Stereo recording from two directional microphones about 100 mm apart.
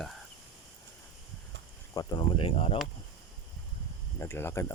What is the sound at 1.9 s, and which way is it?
Speech, 35° left (ahead or behind).